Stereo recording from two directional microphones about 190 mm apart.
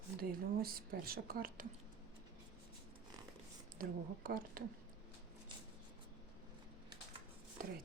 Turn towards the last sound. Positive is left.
turn(degrees=-50)  # may be behind; listen again after turning